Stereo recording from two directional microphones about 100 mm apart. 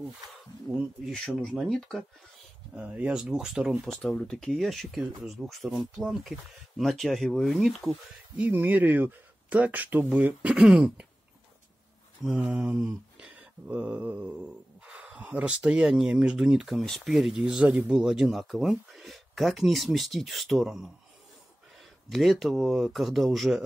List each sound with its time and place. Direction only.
0.7 s speech: 5° right (ahead or behind)
2.7 s speech: 15° right (ahead or behind)
8.4 s speech: 15° right (ahead or behind)
12.3 s mantra: 10° right (ahead or behind)
14.9 s speech: 10° right (ahead or behind)
22.1 s speech: centre (ahead or behind)